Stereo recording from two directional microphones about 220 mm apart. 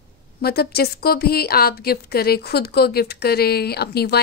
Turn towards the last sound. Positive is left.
turn(degrees=45)  # may be behind; listen again after turning